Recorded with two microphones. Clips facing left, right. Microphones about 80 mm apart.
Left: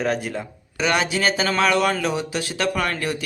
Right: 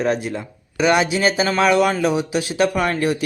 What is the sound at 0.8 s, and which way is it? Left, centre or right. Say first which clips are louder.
A man's voice: right 5 dB; centre.